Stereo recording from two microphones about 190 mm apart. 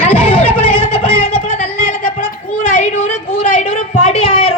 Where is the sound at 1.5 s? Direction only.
45° left (ahead or behind).